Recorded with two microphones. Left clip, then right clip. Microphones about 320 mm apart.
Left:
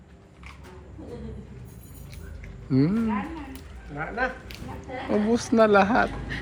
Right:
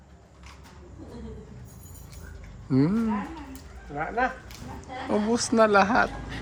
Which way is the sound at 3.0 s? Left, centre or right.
Right.